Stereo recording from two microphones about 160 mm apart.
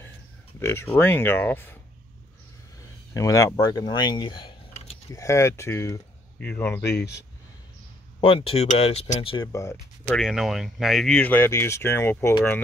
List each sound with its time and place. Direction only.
0.6 s speech: 15° left (ahead or behind)
3.2 s speech: 20° left (ahead or behind)
5.1 s speech: 20° left (ahead or behind)
8.2 s speech: 35° left (ahead or behind)
9.5 s speech: 20° left (ahead or behind)
10.0 s speech: centre (ahead or behind)